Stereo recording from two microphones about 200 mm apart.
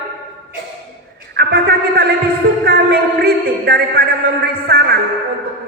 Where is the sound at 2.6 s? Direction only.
50° right (ahead or behind).